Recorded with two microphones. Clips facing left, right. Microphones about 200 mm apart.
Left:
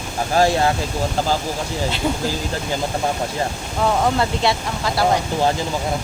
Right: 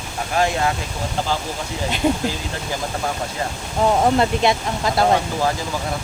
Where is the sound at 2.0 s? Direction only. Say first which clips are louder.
Right 5 dB; 20° right (ahead or behind).